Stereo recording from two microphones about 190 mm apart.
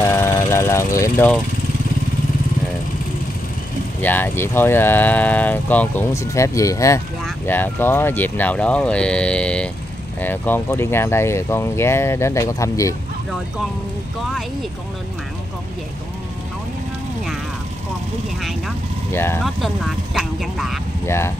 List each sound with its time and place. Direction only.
0.0 s vehicle: 15° left (ahead or behind)
4.0 s speech: 10° left (ahead or behind)
19.1 s speech: 10° left (ahead or behind)
19.4 s speech: centre (ahead or behind)
21.0 s speech: 15° left (ahead or behind)